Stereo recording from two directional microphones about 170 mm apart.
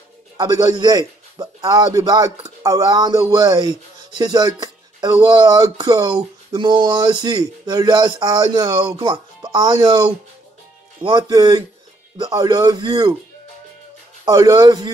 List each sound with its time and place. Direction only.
0.4 s speech: 25° right (ahead or behind)
14.3 s speech: 25° right (ahead or behind)